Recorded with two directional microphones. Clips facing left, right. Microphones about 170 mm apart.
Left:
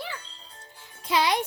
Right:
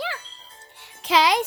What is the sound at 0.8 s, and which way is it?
Music, 85° right.